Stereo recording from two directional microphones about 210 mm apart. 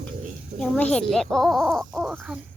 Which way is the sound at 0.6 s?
5° left (ahead or behind).